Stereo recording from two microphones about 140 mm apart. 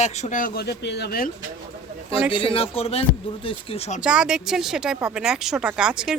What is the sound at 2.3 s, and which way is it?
Speech, 40° left (ahead or behind).